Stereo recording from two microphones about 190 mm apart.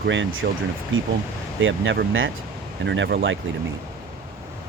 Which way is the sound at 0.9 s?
90° right.